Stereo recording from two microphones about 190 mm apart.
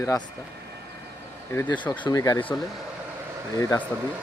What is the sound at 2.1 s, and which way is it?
Speech, 20° left (ahead or behind).